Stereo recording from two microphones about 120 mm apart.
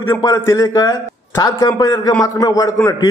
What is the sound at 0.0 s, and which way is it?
A man's voice, 25° left (ahead or behind).